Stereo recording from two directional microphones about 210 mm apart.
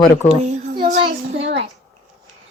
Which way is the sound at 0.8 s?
45° right (ahead or behind).